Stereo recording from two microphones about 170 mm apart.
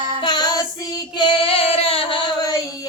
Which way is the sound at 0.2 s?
25° left (ahead or behind).